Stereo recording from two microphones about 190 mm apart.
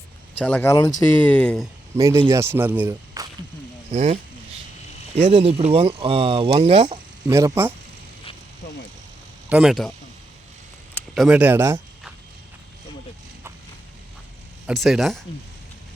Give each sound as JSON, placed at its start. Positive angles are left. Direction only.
{"t": 0.3, "sound": "speech", "side_deg": 10}
{"t": 2.0, "sound": "speech", "side_deg": -15}
{"t": 3.2, "sound": "a sound", "side_deg": -20}
{"t": 3.9, "sound": "speech", "side_deg": -35}
{"t": 7.3, "sound": "speech", "side_deg": -15}
{"t": 8.6, "sound": "vehicle", "side_deg": 55}
{"t": 9.5, "sound": "speech", "side_deg": -5}
{"t": 11.1, "sound": "speech", "side_deg": 0}
{"t": 14.7, "sound": "speech", "side_deg": 0}